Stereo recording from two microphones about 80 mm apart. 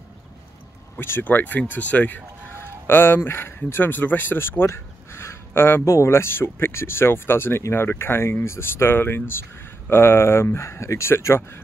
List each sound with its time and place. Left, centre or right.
0.9 s speech: left